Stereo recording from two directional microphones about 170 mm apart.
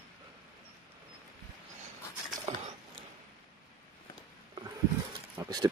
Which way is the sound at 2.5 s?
40° right (ahead or behind).